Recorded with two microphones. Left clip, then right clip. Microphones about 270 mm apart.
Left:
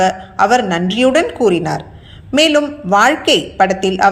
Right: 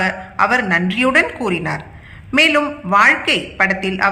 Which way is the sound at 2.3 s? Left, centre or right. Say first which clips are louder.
Left 2 dB; centre.